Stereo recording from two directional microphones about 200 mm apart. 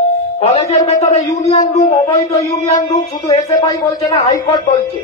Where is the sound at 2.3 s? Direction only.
20° left (ahead or behind).